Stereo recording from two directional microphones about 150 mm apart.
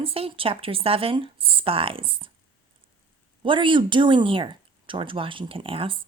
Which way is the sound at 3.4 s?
35° right (ahead or behind).